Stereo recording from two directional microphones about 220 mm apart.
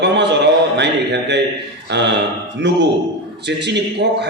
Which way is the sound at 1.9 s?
50° right (ahead or behind).